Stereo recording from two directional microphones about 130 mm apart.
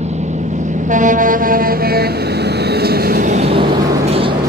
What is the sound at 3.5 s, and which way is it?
Vehicle, 45° right (ahead or behind).